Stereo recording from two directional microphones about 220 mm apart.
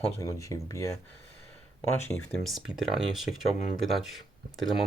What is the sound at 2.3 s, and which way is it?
Speech, centre (ahead or behind).